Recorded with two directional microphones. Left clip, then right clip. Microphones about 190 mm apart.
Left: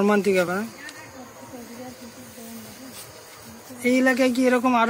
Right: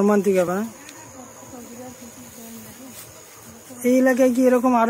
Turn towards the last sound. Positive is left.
turn(degrees=-35)  # may be behind; listen again after turning